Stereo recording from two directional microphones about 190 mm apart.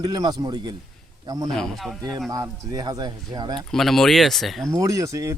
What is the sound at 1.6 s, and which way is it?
Speech, centre (ahead or behind).